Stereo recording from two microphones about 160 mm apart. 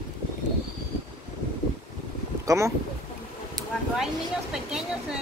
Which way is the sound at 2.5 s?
20° right (ahead or behind).